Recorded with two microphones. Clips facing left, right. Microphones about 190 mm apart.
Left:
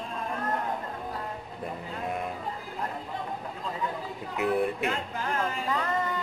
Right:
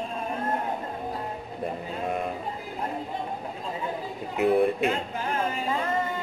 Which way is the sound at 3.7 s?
25° right (ahead or behind).